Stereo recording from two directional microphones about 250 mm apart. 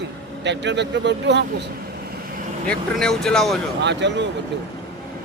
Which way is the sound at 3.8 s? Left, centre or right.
Right.